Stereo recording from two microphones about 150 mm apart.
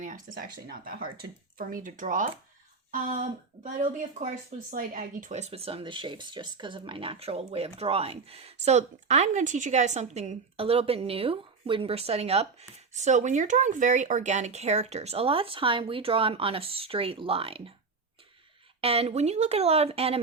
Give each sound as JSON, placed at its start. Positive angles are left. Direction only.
{"t": 0.0, "sound": "speech", "side_deg": -65}
{"t": 4.7, "sound": "speech", "side_deg": -60}
{"t": 18.8, "sound": "speech", "side_deg": -40}